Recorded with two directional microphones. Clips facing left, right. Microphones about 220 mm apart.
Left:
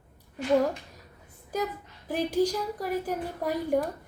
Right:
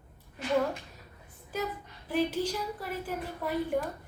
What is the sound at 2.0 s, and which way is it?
A woman's voice, 40° left (ahead or behind).